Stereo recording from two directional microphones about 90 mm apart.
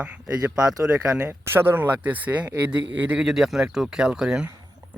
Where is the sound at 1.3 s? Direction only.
25° right (ahead or behind).